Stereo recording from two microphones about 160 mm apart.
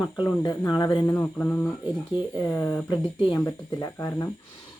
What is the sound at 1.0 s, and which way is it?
Mantra, 10° left (ahead or behind).